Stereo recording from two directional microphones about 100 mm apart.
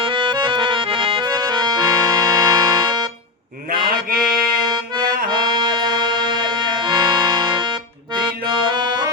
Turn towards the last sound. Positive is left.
turn(degrees=-45)  # may be behind; listen again after turning